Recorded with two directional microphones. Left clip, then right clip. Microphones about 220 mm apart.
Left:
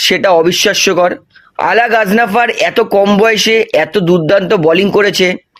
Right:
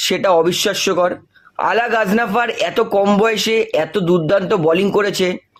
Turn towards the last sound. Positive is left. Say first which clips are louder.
# left 6 dB
turn(degrees=30)  # may be behind; listen again after turning